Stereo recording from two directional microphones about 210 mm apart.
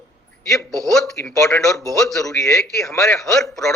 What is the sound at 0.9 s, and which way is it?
Speech, centre (ahead or behind).